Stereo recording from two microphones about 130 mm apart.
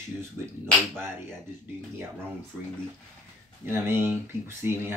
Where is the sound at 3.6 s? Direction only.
15° right (ahead or behind).